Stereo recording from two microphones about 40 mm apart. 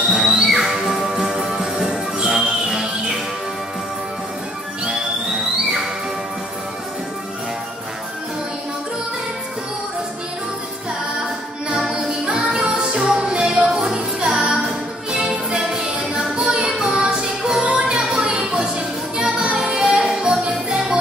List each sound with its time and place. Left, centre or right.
0.1 s music: centre
0.5 s music: centre
11.9 s music: centre
19.6 s music: centre
19.9 s music: right